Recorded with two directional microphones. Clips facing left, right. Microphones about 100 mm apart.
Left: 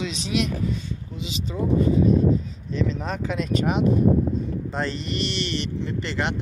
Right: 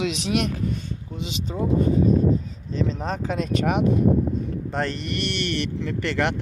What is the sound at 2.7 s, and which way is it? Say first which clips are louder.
Speech: even; 35° right (ahead or behind).